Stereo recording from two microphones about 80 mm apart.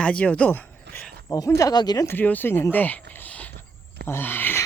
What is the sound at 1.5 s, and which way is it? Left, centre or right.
Speech, left.